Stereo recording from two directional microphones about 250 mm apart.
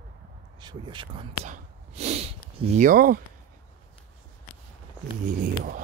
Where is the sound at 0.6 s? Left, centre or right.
Centre; by 3.2 s right.